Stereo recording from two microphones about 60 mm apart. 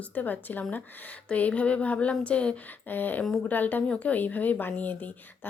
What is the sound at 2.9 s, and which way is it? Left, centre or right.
Speech, left.